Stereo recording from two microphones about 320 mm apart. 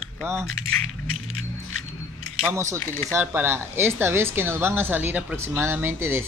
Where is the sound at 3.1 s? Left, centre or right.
Centre.